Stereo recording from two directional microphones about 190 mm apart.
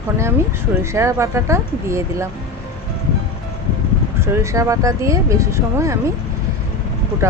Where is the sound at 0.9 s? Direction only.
15° right (ahead or behind).